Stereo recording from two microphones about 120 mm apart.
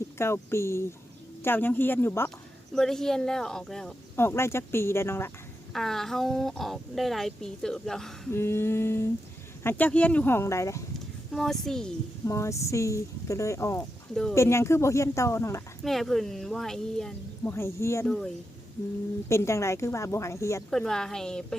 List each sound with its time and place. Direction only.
0.2 s speech: 20° left (ahead or behind)
2.7 s speech: 5° left (ahead or behind)
4.1 s speech: 20° left (ahead or behind)
5.7 s speech: centre (ahead or behind)
8.3 s speech: 20° left (ahead or behind)
11.3 s speech: 5° left (ahead or behind)
12.2 s speech: 25° left (ahead or behind)
15.8 s speech: centre (ahead or behind)
17.4 s speech: 20° left (ahead or behind)
18.0 s speech: 5° left (ahead or behind)
19.3 s speech: 25° left (ahead or behind)
20.7 s speech: 5° left (ahead or behind)